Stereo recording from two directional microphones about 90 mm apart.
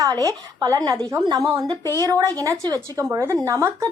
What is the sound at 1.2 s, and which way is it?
Speech, 50° right (ahead or behind).